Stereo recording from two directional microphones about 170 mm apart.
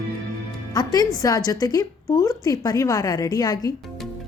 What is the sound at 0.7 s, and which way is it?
A woman's voice, 20° left (ahead or behind).